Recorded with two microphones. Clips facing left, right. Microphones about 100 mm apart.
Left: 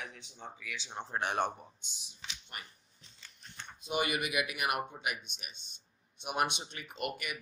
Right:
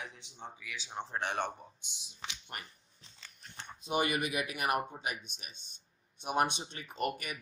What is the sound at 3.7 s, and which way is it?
A man's voice, 40° right (ahead or behind).